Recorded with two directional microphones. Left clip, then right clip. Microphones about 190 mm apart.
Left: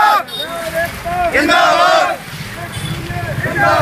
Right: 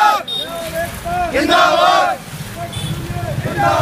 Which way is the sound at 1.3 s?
40° left (ahead or behind).